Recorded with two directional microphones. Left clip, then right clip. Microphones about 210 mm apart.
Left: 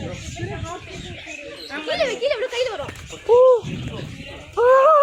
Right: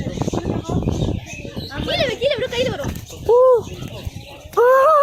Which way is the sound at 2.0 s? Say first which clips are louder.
Right 2 dB; 45° right (ahead or behind).